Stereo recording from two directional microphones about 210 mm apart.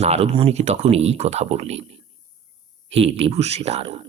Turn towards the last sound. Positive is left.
turn(degrees=-30)  # may be behind; listen again after turning